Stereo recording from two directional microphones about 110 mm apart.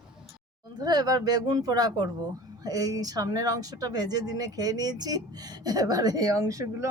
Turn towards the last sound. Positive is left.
turn(degrees=-30)  # may be behind; listen again after turning